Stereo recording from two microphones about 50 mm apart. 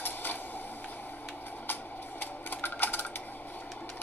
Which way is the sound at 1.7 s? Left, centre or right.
Left.